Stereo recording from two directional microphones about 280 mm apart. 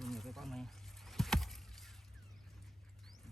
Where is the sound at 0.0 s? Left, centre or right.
Centre.